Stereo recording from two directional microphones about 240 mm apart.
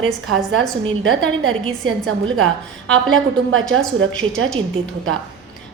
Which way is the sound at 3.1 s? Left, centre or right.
Right.